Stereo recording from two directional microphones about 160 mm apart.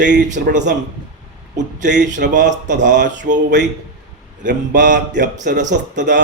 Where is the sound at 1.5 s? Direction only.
50° right (ahead or behind).